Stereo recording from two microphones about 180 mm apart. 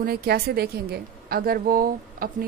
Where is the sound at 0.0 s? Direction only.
60° right (ahead or behind).